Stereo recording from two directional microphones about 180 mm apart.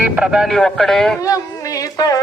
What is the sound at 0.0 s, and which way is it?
Speech, 5° right (ahead or behind).